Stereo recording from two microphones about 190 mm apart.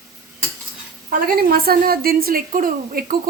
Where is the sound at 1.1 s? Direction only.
50° right (ahead or behind).